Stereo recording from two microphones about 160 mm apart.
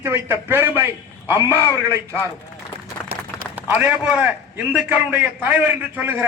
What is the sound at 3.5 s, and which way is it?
A man's voice, 10° right (ahead or behind).